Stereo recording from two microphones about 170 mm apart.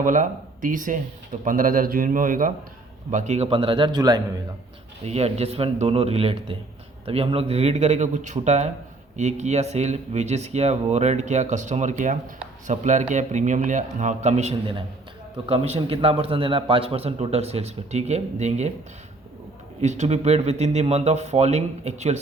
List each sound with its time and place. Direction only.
0.0 s a man's voice: 50° right (ahead or behind); by 4.2 s 25° right (ahead or behind)
5.0 s a man's voice: 40° right (ahead or behind)
19.8 s a man's voice: 40° right (ahead or behind)